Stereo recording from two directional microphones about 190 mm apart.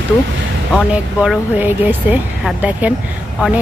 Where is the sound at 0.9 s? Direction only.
5° right (ahead or behind).